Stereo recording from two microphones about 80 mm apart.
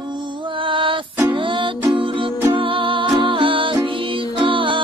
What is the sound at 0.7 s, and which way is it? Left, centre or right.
Music, right.